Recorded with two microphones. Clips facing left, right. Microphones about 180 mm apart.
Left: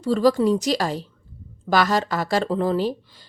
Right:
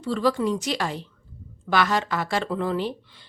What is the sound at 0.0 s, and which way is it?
A woman's voice, 40° left (ahead or behind).